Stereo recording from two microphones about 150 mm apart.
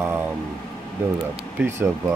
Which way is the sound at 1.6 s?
15° right (ahead or behind).